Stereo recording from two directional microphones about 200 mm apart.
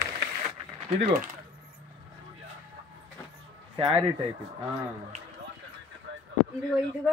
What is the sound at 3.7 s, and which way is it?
Speech, 25° right (ahead or behind).